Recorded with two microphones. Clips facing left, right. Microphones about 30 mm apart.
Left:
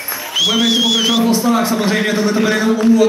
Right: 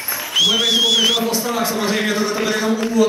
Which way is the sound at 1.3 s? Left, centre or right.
Centre.